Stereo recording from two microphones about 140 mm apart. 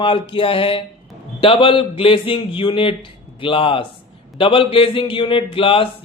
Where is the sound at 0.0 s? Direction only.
40° left (ahead or behind).